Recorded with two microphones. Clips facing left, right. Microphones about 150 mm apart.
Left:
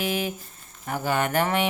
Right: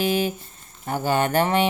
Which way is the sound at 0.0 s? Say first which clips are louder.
Right 5 dB; 30° right (ahead or behind).